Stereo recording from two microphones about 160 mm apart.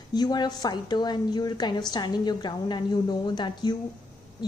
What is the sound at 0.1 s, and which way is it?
A woman's voice, 25° left (ahead or behind).